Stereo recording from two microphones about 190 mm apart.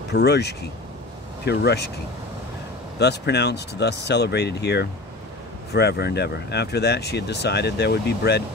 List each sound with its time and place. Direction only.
0.1 s speech: 60° left (ahead or behind)
3.0 s speech: 60° left (ahead or behind)